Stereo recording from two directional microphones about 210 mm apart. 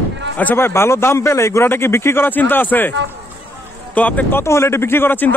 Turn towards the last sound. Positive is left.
turn(degrees=10)  # may be behind; listen again after turning